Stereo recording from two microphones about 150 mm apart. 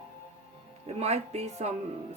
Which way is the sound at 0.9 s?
45° right (ahead or behind).